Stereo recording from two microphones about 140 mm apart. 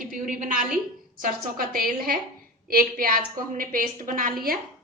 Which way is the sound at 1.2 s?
90° right.